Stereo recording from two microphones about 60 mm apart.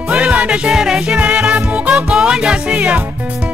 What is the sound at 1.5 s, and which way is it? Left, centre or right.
Music, centre.